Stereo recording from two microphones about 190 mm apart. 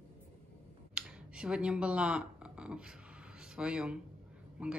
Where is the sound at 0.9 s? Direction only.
5° right (ahead or behind).